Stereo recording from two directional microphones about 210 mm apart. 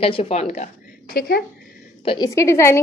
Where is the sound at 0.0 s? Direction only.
25° left (ahead or behind).